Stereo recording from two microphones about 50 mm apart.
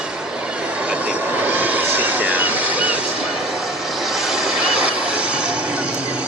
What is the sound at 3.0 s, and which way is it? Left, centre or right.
Vehicle, centre.